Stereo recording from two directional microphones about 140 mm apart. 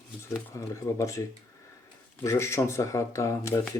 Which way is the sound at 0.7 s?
20° left (ahead or behind).